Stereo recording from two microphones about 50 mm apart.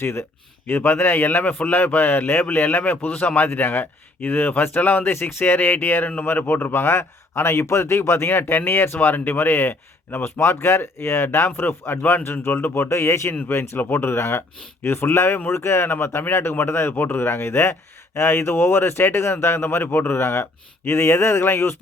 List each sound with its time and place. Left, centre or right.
0.0 s speech: left
0.7 s a man's voice: left
1.5 s speech: left
3.4 s a man's voice: left
13.7 s speech: left
16.9 s speech: left
17.2 s speech: left